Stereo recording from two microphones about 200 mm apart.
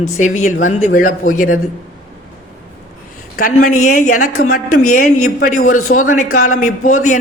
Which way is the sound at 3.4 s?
45° left (ahead or behind).